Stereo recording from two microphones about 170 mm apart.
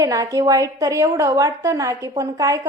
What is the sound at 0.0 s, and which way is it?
A woman's voice, 20° right (ahead or behind).